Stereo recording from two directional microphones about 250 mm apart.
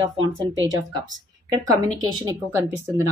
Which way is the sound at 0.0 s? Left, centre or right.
Centre.